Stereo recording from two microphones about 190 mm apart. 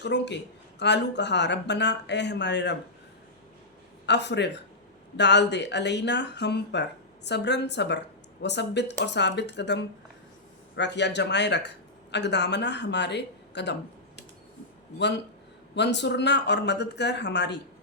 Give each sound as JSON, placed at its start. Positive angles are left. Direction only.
{"t": 0.0, "sound": "speech", "side_deg": 65}
{"t": 4.0, "sound": "speech", "side_deg": 65}
{"t": 14.9, "sound": "speech", "side_deg": 65}